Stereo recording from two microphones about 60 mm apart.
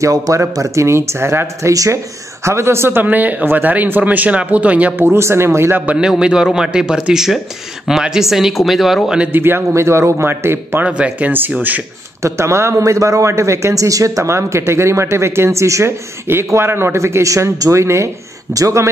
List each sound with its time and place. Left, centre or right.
0.0 s a man's voice: right
1.7 s speech: right
2.4 s speech: right
4.9 s a man's voice: right
5.9 s a man's voice: centre
9.3 s a man's voice: right
10.9 s speech: centre
12.2 s a man's voice: right